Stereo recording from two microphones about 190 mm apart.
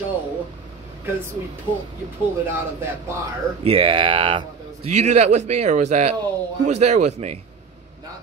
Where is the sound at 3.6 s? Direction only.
30° right (ahead or behind).